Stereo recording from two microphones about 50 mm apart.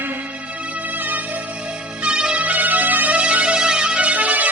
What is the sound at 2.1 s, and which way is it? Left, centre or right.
Music, centre.